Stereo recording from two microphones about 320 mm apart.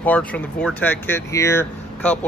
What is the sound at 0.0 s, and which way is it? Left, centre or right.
Speech, centre.